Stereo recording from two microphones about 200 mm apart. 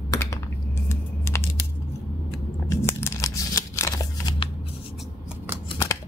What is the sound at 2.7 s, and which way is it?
Scissors, 15° left (ahead or behind).